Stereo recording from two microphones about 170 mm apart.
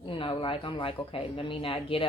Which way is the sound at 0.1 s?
30° left (ahead or behind).